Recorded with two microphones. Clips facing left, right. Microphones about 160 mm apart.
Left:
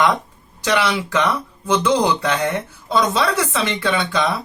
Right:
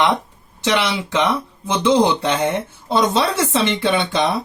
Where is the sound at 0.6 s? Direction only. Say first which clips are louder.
Even; 25° right (ahead or behind).